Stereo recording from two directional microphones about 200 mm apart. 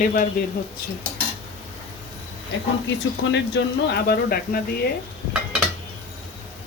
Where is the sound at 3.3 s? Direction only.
55° left (ahead or behind).